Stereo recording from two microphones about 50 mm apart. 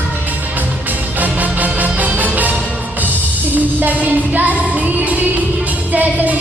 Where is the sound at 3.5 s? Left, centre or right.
Right.